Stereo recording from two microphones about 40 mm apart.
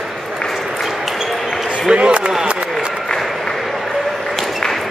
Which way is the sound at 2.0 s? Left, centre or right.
Right.